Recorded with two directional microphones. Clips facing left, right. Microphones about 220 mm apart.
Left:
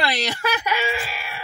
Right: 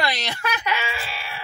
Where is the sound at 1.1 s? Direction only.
45° left (ahead or behind).